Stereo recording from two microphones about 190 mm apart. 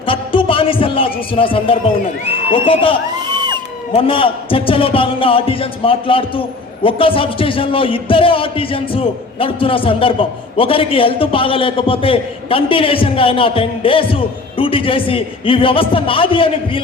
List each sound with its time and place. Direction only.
0.0 s music: 30° left (ahead or behind)
2.5 s a man's voice: 30° left (ahead or behind)
3.3 s cat: 25° right (ahead or behind)
3.9 s a man's voice: 30° left (ahead or behind)